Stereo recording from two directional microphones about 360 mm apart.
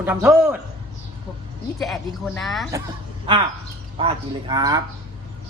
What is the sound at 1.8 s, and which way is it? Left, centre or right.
Speech, centre.